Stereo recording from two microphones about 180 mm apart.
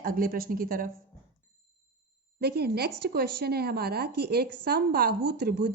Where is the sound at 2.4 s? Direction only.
65° right (ahead or behind).